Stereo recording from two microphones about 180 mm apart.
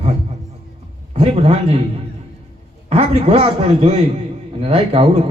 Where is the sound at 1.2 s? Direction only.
35° right (ahead or behind).